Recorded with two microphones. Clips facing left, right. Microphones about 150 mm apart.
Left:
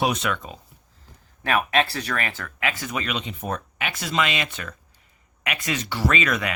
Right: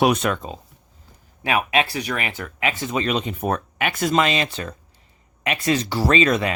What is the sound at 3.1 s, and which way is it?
Speech, 50° right (ahead or behind).